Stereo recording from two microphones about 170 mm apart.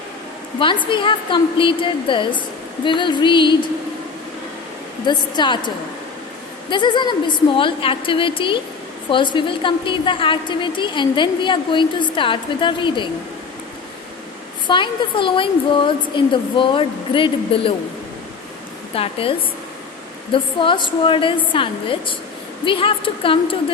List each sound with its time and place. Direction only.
0.9 s a woman's voice: 30° left (ahead or behind)
5.0 s a woman's voice: 25° left (ahead or behind)
14.7 s a woman's voice: 30° left (ahead or behind)
18.9 s a woman's voice: 35° left (ahead or behind)
20.3 s a woman's voice: 30° left (ahead or behind)